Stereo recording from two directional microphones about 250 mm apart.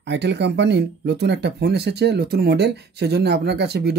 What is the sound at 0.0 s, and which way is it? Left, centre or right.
Speech, right.